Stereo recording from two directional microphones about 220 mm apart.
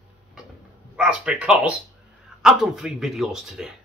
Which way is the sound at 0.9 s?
5° right (ahead or behind).